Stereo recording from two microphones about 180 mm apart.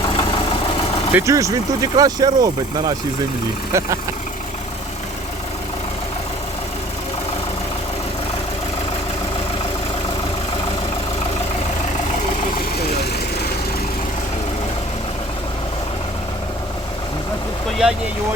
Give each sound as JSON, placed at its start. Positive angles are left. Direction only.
{"t": 0.2, "sound": "vehicle", "side_deg": 30}
{"t": 1.1, "sound": "speech", "side_deg": -15}
{"t": 17.7, "sound": "vehicle", "side_deg": 0}